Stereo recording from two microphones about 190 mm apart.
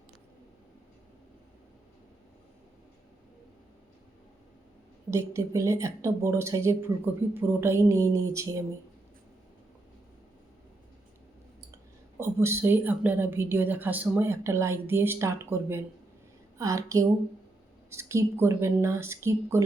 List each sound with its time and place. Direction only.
5.1 s a woman's voice: 15° right (ahead or behind)
12.1 s a woman's voice: 15° right (ahead or behind)